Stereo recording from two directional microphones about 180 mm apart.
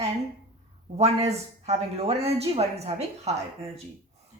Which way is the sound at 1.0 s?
35° right (ahead or behind).